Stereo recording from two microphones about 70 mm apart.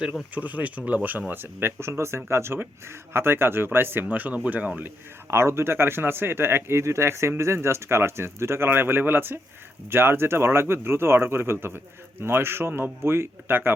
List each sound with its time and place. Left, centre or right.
0.3 s speech: right
5.3 s speech: right